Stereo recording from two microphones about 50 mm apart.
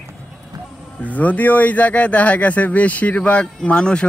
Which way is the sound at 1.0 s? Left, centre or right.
Left.